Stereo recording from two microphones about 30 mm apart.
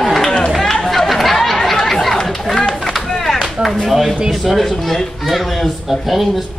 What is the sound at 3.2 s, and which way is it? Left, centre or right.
Speech, centre.